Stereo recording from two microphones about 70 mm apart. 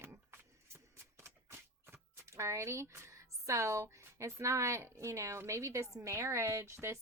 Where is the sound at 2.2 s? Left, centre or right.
Right.